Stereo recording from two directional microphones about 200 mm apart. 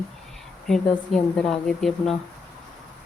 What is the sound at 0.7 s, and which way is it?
Speech, centre (ahead or behind).